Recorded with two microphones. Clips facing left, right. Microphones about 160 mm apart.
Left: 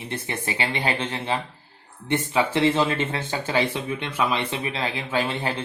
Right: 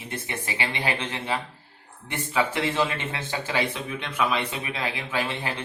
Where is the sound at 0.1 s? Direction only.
30° left (ahead or behind).